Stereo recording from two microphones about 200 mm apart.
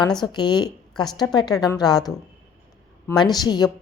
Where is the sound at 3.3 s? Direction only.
20° left (ahead or behind).